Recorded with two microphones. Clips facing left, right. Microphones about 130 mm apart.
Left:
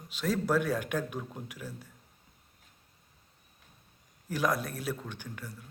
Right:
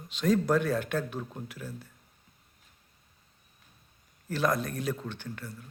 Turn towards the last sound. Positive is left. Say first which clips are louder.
# right 3 dB
turn(degrees=10)  # may be behind; listen again after turning